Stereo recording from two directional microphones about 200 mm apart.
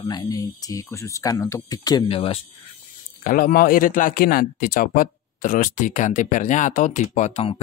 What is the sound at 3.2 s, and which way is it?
Speech, 45° left (ahead or behind).